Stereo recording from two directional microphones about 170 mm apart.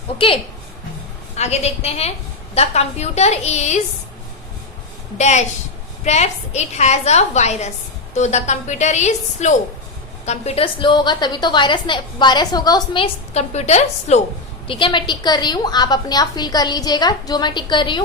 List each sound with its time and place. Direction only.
1.4 s a woman's voice: 40° left (ahead or behind)
5.1 s a woman's voice: 45° left (ahead or behind)
14.7 s a woman's voice: 30° left (ahead or behind)